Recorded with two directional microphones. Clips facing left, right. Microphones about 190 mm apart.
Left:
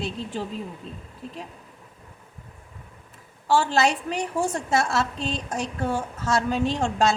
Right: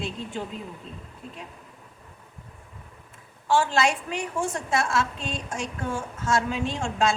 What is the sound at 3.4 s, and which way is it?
A woman's voice, 40° left (ahead or behind).